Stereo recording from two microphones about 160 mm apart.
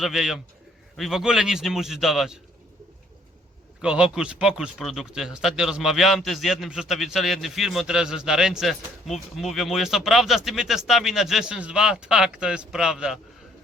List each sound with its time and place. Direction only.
0.0 s speech: 5° right (ahead or behind)
3.8 s speech: 5° right (ahead or behind)